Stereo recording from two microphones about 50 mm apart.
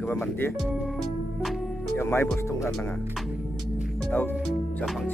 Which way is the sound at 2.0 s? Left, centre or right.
Left.